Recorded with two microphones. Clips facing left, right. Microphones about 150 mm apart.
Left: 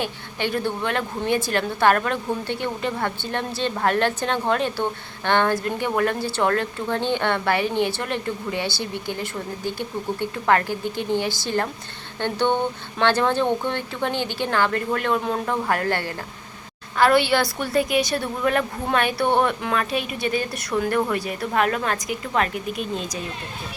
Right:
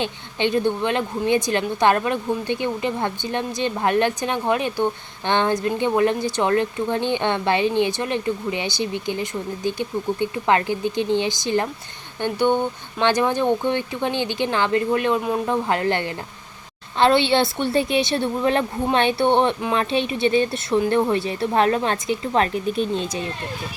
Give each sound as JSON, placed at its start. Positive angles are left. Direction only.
{"t": 0.0, "sound": "a woman's voice", "side_deg": -20}